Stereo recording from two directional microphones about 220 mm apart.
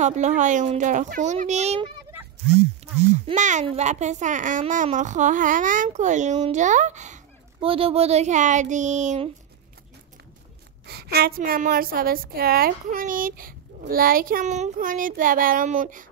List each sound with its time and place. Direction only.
0.0 s a woman's voice: 30° right (ahead or behind)
3.3 s a woman's voice: 35° right (ahead or behind)
10.9 s a woman's voice: 45° right (ahead or behind)